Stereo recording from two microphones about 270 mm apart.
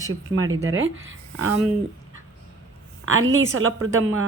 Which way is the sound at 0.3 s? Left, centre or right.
Right.